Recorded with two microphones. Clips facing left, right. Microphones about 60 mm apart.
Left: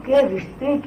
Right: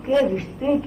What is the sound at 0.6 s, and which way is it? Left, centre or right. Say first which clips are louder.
Speech: even; left.